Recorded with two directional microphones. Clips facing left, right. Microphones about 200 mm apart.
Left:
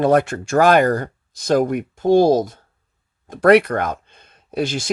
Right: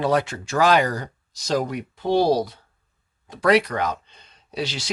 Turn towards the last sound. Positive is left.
turn(degrees=50)  # may be behind; listen again after turning